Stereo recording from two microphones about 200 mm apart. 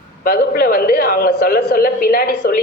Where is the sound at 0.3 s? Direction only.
50° left (ahead or behind).